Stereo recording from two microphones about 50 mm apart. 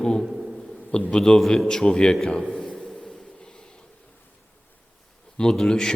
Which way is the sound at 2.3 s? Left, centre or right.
Centre.